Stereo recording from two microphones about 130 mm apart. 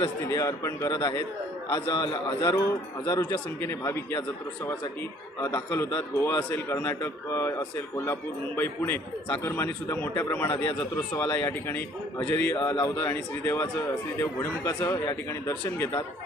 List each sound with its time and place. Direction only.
0.3 s a man's voice: 25° left (ahead or behind)
5.4 s a man's voice: 25° left (ahead or behind)